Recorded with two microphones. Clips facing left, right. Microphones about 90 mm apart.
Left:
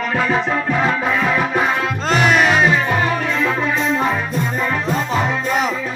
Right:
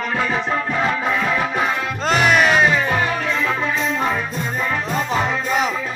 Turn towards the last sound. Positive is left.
turn(degrees=0)  # may be behind; listen again after turning